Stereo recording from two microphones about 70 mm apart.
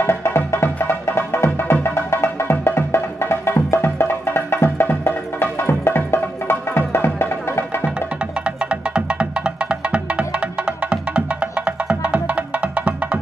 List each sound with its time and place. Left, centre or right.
0.0 s music: left
8.5 s music: centre